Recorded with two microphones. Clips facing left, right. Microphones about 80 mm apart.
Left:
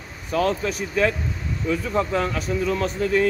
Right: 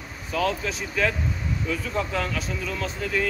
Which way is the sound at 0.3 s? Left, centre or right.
Left.